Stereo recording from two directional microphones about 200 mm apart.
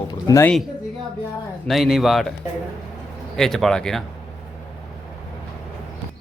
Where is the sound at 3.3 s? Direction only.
Centre (ahead or behind).